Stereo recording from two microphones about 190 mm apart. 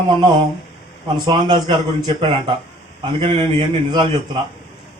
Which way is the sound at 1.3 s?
25° right (ahead or behind).